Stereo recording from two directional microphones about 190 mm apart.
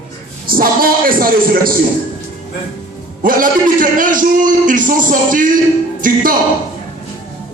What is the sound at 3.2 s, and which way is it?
A man's voice, 45° right (ahead or behind).